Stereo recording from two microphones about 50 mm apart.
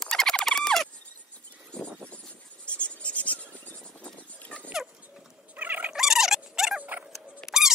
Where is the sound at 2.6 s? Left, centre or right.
Left.